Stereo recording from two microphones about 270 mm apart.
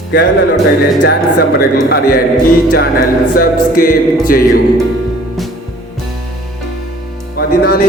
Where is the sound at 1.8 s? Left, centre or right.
Left.